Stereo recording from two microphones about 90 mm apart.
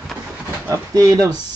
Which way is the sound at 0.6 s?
35° right (ahead or behind).